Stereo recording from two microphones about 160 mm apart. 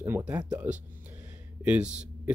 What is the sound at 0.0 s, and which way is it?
Speech, 10° right (ahead or behind).